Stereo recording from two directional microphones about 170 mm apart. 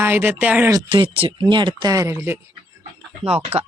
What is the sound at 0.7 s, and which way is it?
Speech, 30° right (ahead or behind).